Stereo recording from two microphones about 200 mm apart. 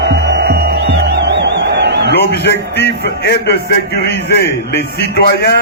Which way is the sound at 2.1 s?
60° left (ahead or behind).